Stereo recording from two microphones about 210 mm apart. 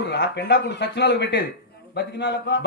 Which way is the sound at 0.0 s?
55° left (ahead or behind).